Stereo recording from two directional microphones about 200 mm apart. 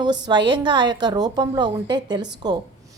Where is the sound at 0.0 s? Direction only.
20° right (ahead or behind).